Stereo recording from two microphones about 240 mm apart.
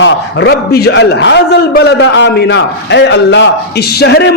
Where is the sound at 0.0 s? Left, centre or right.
Left.